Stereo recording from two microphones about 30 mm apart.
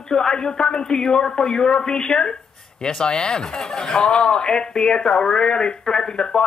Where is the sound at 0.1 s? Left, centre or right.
Left.